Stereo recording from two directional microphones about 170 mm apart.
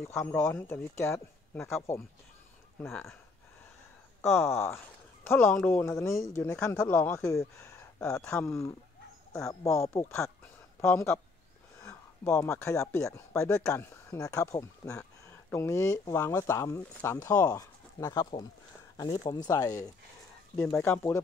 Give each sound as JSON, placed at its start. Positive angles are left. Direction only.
{"t": 0.1, "sound": "speech", "side_deg": 15}
{"t": 4.2, "sound": "speech", "side_deg": 0}
{"t": 4.5, "sound": "speech", "side_deg": 10}